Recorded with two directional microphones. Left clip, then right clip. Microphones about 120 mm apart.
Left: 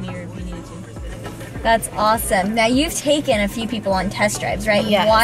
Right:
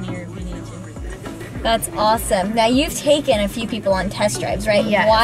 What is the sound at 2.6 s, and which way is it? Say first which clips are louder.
Speech: right 2 dB; 20° right (ahead or behind).